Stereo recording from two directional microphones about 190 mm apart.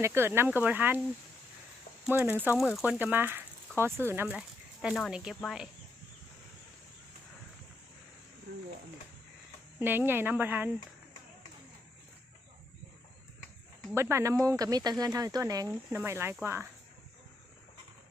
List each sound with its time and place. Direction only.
0.0 s speech: 10° right (ahead or behind)
2.0 s speech: 10° right (ahead or behind)
8.5 s speech: 55° right (ahead or behind)
9.7 s speech: 10° right (ahead or behind)
13.9 s speech: 15° right (ahead or behind)